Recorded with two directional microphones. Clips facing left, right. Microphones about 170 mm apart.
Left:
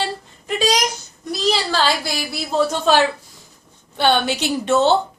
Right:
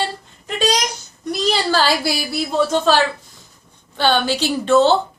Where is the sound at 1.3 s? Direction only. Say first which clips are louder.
Right 2 dB; centre (ahead or behind).